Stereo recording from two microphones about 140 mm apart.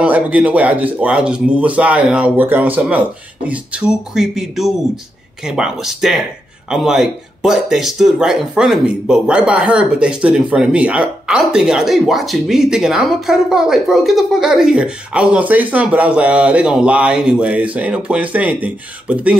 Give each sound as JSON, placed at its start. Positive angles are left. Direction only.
{"t": 0.0, "sound": "speech", "side_deg": -10}